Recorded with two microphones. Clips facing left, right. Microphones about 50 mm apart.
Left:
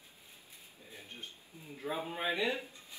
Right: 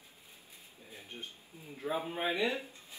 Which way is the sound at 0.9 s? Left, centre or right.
Right.